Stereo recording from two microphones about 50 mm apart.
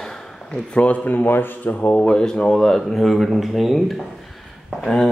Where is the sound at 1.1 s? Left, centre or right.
Left.